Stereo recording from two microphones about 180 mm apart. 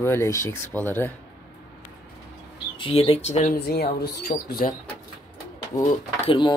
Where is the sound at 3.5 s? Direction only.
65° left (ahead or behind).